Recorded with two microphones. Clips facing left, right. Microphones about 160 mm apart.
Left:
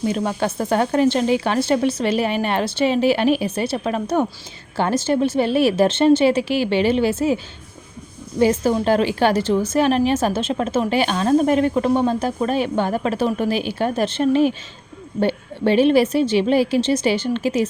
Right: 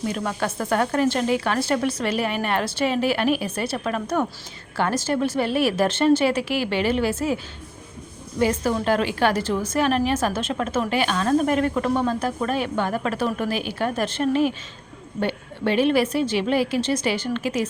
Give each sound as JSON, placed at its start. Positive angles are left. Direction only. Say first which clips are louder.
{"t": 0.1, "sound": "a woman's voice", "louder": "left 4 dB", "side_deg": 30}
{"t": 8.4, "sound": "a woman's voice", "louder": "left 5 dB", "side_deg": 30}